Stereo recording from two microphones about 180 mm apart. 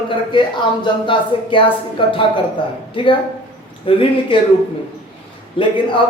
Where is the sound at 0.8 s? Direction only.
25° left (ahead or behind).